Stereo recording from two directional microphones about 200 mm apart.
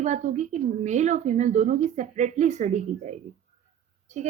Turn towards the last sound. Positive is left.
turn(degrees=-35)  # may be behind; listen again after turning